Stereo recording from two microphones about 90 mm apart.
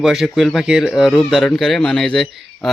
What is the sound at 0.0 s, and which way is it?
A man's voice, 5° right (ahead or behind).